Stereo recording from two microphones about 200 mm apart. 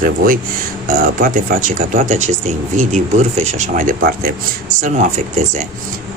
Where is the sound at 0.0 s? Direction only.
45° right (ahead or behind).